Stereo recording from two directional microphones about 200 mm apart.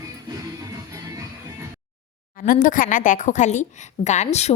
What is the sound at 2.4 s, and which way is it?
A woman's voice, 45° left (ahead or behind).